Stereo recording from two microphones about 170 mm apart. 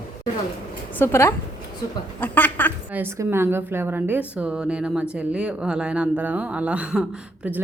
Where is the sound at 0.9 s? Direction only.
15° left (ahead or behind).